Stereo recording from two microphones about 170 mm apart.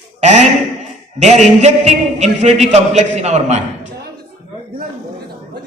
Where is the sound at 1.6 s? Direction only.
40° right (ahead or behind).